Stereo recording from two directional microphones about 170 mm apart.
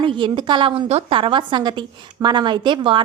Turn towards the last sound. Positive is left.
turn(degrees=-30)  # may be behind; listen again after turning